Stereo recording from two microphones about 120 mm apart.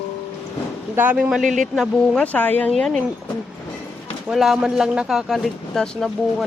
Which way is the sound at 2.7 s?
5° left (ahead or behind).